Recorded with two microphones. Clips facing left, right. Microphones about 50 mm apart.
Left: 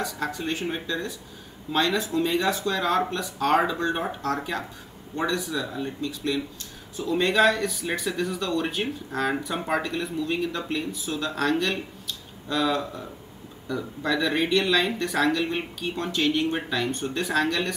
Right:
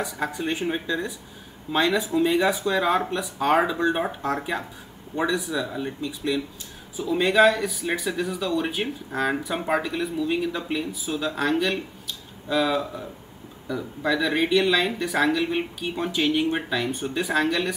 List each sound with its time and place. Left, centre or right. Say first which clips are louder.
0.0 s speech: right 2 dB; centre